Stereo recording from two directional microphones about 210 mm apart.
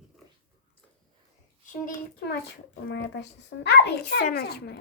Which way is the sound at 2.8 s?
55° left (ahead or behind).